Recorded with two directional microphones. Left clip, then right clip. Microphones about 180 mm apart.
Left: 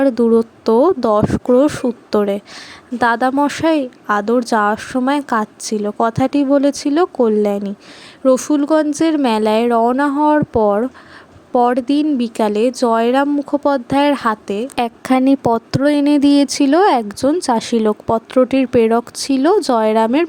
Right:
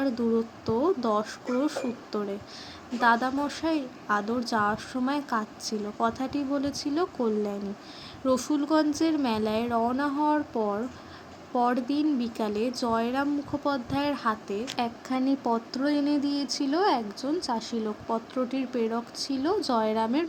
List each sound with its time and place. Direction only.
0.0 s speech: 55° left (ahead or behind)